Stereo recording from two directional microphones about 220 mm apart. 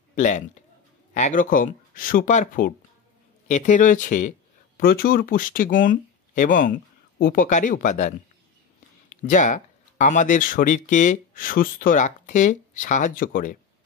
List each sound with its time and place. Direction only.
0.1 s speech: 35° left (ahead or behind)
9.2 s speech: 35° left (ahead or behind)